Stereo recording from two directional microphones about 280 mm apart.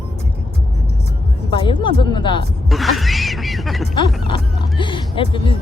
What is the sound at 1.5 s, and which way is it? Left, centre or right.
Speech, centre.